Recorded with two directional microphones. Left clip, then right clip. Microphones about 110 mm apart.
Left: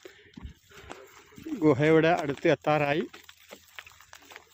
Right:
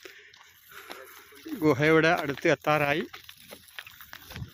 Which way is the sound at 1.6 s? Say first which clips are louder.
Even; 25° left (ahead or behind).